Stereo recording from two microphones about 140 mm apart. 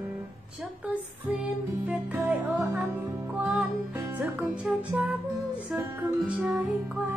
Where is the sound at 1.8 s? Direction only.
10° right (ahead or behind).